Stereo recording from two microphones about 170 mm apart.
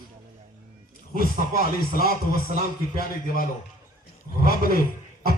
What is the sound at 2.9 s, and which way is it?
Speech, 60° left (ahead or behind).